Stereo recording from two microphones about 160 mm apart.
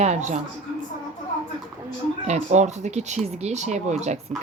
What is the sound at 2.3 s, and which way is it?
Speech, 45° right (ahead or behind).